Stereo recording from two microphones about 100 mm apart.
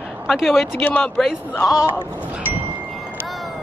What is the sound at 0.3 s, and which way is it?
Speech, 5° right (ahead or behind).